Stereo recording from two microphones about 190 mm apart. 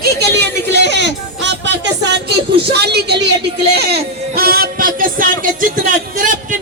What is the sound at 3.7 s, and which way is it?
Music, 55° right (ahead or behind).